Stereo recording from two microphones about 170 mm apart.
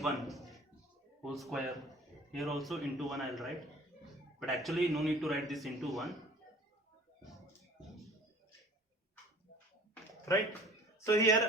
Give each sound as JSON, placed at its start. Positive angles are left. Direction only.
{"t": 0.0, "sound": "a man's voice", "side_deg": 0}
{"t": 10.3, "sound": "speech", "side_deg": 20}